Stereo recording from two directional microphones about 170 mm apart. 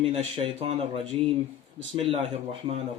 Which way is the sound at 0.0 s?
35° right (ahead or behind).